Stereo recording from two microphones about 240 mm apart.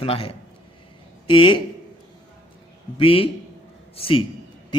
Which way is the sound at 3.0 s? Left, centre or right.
Left.